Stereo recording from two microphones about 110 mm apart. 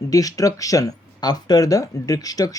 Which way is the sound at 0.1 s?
30° left (ahead or behind).